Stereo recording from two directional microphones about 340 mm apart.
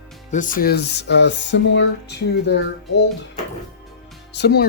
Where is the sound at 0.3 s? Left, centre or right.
Left.